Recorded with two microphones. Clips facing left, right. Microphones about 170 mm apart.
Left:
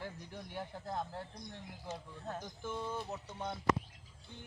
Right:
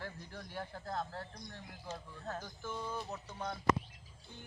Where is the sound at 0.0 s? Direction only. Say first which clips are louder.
Left 1 dB; 20° left (ahead or behind).